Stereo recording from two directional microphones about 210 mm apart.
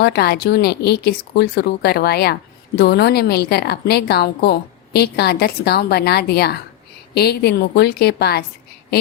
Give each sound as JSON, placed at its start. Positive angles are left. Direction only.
{"t": 0.0, "sound": "speech", "side_deg": 50}